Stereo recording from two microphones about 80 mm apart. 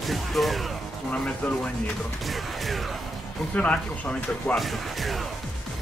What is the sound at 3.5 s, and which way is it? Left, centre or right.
Speech, centre.